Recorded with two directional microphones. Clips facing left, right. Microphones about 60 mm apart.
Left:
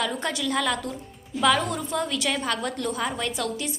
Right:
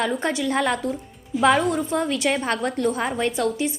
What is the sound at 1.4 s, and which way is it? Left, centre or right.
A woman's voice, right.